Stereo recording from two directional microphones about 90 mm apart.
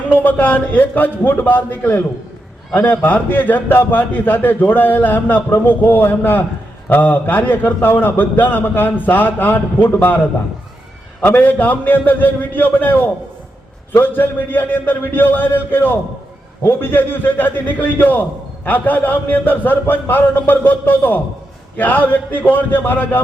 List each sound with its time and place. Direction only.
0.1 s a man's voice: 20° left (ahead or behind)
11.2 s a man's voice: 20° left (ahead or behind)